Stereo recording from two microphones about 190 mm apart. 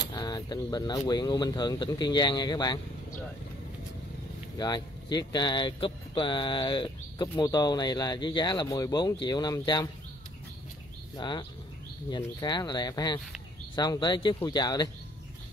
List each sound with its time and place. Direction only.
0.1 s speech: 20° left (ahead or behind)
4.6 s speech: 20° left (ahead or behind)
11.1 s speech: 25° left (ahead or behind)